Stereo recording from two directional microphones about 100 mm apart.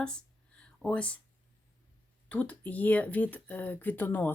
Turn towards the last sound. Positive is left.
turn(degrees=20)  # may be behind; listen again after turning